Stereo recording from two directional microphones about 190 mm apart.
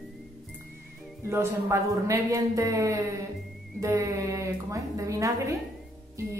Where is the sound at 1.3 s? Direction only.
15° right (ahead or behind).